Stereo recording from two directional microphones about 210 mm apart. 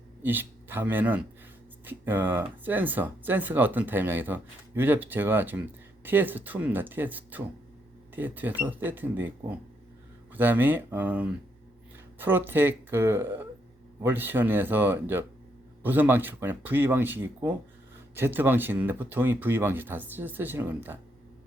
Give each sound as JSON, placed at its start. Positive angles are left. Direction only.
{"t": 0.2, "sound": "speech", "side_deg": -10}